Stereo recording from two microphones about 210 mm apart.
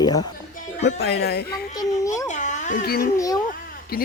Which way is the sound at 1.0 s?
50° left (ahead or behind).